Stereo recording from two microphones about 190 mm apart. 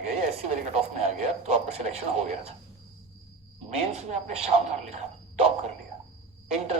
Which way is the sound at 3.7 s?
35° right (ahead or behind).